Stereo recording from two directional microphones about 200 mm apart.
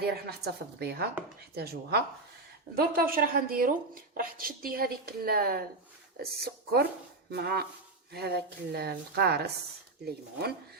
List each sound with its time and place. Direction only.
0.0 s a woman's voice: 50° right (ahead or behind)